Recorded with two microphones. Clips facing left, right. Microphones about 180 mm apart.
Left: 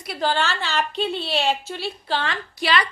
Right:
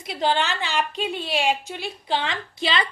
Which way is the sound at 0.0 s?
20° right (ahead or behind).